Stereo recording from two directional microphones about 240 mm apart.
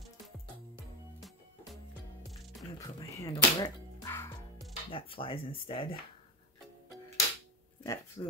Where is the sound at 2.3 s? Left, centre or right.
Centre.